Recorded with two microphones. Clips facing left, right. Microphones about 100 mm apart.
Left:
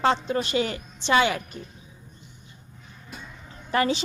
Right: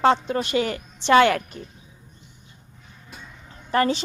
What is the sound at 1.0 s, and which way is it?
Speech, 60° right (ahead or behind).